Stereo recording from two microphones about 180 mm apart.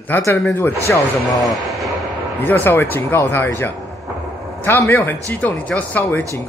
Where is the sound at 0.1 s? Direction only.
10° left (ahead or behind).